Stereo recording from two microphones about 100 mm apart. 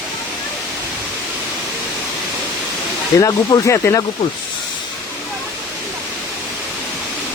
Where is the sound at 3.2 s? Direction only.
35° left (ahead or behind).